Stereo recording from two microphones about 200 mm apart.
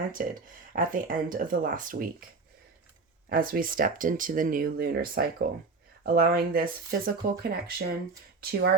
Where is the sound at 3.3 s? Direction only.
45° right (ahead or behind).